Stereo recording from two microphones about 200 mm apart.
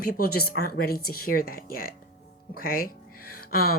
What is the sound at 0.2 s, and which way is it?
Speech, 50° left (ahead or behind).